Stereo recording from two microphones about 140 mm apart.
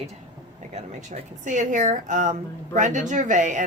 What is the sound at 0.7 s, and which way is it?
Speech, 55° right (ahead or behind).